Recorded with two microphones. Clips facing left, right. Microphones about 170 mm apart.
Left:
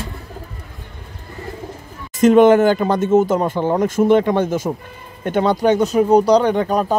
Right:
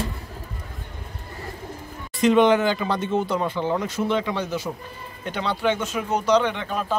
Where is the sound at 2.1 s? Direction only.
45° left (ahead or behind).